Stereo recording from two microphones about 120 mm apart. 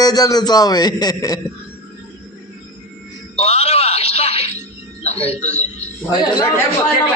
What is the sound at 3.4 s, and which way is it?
Music, 60° left (ahead or behind).